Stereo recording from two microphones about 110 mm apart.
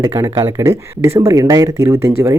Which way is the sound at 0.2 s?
30° right (ahead or behind).